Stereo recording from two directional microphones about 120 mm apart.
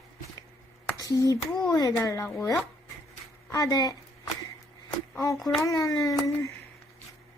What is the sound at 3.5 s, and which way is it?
Speech, 30° left (ahead or behind).